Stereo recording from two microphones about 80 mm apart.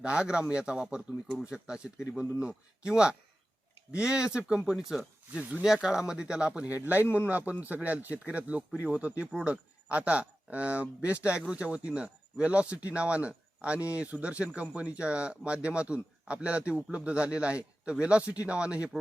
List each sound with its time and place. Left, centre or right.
0.0 s speech: centre
5.3 s a man's voice: centre